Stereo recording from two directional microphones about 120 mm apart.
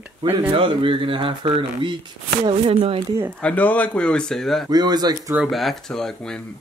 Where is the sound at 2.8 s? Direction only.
40° right (ahead or behind).